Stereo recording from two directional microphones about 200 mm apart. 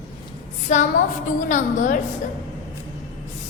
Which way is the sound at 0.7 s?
35° left (ahead or behind).